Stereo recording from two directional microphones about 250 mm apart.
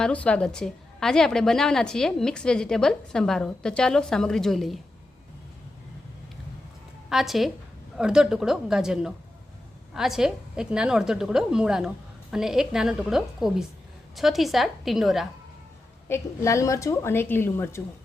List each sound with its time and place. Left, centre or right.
0.0 s a woman's voice: centre
7.1 s a woman's voice: centre
16.0 s a woman's voice: centre